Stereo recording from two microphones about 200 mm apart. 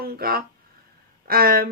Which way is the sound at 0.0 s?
50° right (ahead or behind).